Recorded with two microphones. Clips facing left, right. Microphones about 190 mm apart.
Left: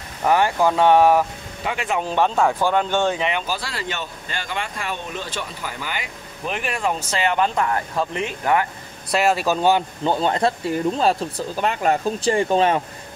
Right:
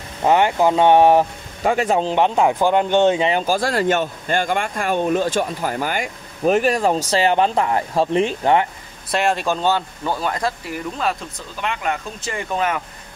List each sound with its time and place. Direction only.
0.2 s speech: 20° right (ahead or behind)
1.6 s speech: 40° right (ahead or behind)
2.0 s speech: 20° right (ahead or behind)
3.3 s speech: 40° right (ahead or behind)
9.1 s speech: 5° left (ahead or behind); by 12.8 s 30° left (ahead or behind)